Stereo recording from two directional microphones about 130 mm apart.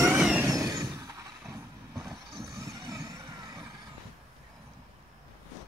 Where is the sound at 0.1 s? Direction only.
10° right (ahead or behind).